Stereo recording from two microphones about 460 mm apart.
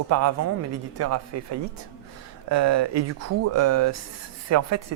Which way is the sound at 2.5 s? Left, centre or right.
Right.